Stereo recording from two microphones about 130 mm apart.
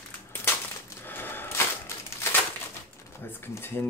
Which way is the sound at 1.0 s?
15° left (ahead or behind).